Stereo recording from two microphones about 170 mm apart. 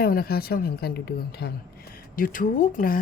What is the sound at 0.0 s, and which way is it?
Speech, 65° left (ahead or behind).